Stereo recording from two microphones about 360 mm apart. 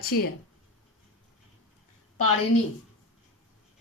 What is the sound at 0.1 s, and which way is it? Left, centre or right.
Speech, left.